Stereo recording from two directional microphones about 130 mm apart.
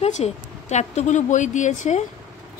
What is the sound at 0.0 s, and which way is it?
A woman's voice, 60° left (ahead or behind).